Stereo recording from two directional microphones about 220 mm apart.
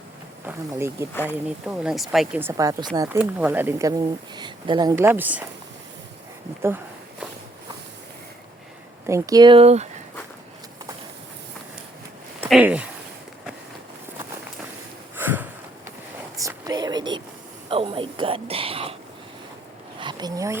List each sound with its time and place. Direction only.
0.4 s speech: 10° right (ahead or behind)
1.1 s speech: 10° left (ahead or behind)
1.6 s speech: 5° right (ahead or behind)
6.6 s a sound: 10° right (ahead or behind)
9.0 s speech: 15° right (ahead or behind); by 9.9 s 30° right (ahead or behind)
12.4 s speech: 5° right (ahead or behind)
15.1 s sniff: 10° right (ahead or behind)
16.4 s a sound: 15° right (ahead or behind)
17.7 s whispering: 25° right (ahead or behind)
20.0 s a sound: 20° right (ahead or behind)